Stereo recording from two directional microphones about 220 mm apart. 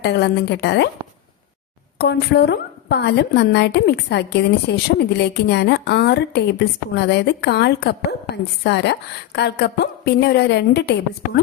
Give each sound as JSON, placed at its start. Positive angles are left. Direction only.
{"t": 0.0, "sound": "a woman's voice", "side_deg": 50}
{"t": 2.0, "sound": "a woman's voice", "side_deg": 50}